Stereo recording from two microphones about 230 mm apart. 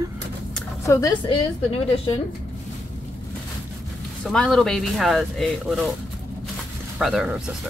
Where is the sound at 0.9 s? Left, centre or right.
Centre.